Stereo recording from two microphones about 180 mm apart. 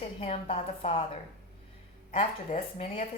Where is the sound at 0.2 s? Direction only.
30° left (ahead or behind).